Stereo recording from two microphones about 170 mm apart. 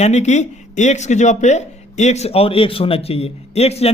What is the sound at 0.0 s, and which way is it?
Speech, 40° left (ahead or behind).